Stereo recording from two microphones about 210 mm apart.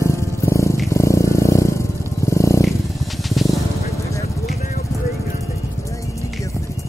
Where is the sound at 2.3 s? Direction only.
15° left (ahead or behind).